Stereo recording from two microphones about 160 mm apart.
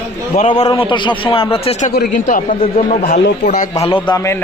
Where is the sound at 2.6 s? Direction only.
40° left (ahead or behind).